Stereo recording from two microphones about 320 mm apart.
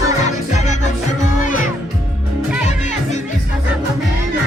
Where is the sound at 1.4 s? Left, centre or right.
Left.